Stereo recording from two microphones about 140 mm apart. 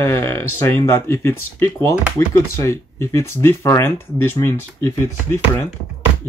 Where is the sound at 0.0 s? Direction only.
20° left (ahead or behind).